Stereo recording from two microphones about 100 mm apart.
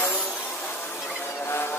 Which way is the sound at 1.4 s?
25° left (ahead or behind).